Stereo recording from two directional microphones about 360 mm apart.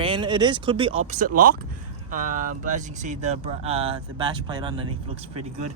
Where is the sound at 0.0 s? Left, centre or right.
Centre.